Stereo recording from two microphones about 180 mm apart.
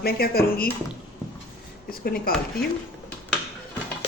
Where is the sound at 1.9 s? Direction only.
55° left (ahead or behind).